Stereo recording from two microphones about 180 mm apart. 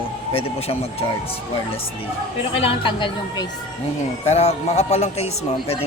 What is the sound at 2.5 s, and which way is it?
A man's voice, 30° left (ahead or behind).